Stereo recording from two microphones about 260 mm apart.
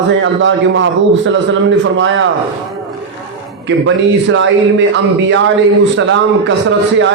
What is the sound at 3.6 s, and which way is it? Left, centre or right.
A man's voice, right.